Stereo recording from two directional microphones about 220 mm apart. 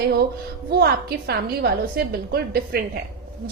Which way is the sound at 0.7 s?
45° right (ahead or behind).